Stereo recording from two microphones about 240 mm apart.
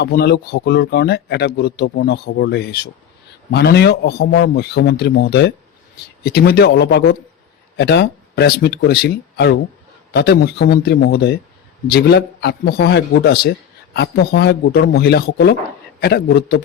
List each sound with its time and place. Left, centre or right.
0.0 s a man's voice: left